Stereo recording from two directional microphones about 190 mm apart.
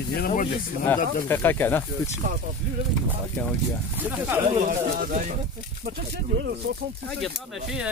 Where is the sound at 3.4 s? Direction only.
5° left (ahead or behind).